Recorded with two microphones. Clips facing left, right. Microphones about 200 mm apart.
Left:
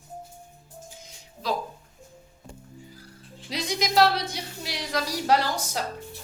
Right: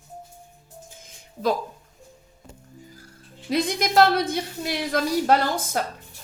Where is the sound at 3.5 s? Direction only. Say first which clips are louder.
Right 5 dB; 55° right (ahead or behind).